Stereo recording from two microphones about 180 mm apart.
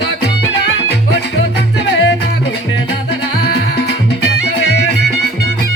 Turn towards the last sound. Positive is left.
turn(degrees=70)  # may be behind; listen again after turning